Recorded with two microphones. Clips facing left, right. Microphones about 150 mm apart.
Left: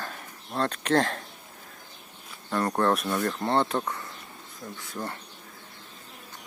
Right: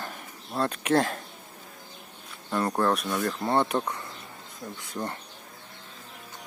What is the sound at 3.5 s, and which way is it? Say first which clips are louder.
Speech: right 1 dB; 15° right (ahead or behind).